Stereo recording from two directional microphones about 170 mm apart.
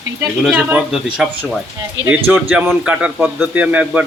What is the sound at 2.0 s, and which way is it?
Speech, 90° right.